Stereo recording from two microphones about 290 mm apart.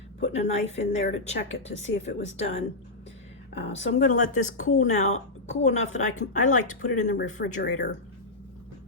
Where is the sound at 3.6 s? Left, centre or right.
Left.